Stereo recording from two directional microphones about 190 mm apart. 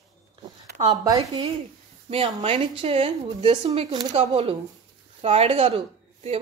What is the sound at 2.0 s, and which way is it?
A woman's voice, 30° right (ahead or behind).